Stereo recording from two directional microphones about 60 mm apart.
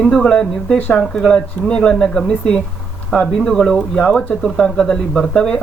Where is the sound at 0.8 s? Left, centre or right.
Left.